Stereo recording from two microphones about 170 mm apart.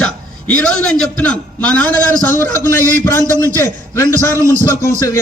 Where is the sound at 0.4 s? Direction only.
5° left (ahead or behind).